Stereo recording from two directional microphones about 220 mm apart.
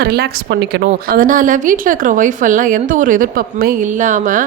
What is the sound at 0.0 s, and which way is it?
Speech, 45° right (ahead or behind).